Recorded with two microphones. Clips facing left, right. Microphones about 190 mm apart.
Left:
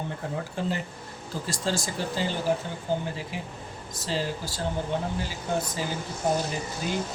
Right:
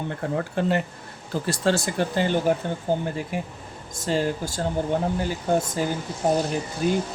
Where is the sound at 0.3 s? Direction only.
65° right (ahead or behind).